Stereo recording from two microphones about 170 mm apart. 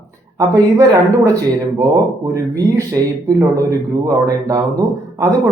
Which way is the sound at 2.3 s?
20° right (ahead or behind).